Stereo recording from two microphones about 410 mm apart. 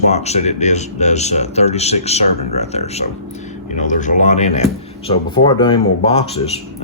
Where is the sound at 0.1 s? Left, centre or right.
Centre.